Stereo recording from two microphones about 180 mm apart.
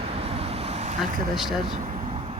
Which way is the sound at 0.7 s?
35° right (ahead or behind).